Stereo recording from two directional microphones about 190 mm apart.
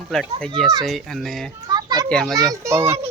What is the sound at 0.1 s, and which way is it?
Speech, 5° left (ahead or behind).